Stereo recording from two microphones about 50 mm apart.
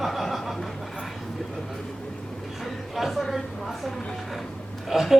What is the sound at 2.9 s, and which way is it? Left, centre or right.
A woman's voice, centre.